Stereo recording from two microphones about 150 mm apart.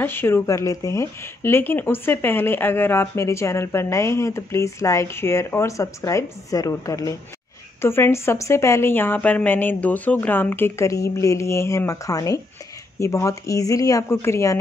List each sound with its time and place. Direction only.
0.0 s speech: 15° left (ahead or behind)